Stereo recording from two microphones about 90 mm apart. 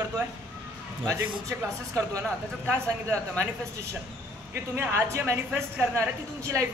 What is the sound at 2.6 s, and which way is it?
Speech, 25° right (ahead or behind).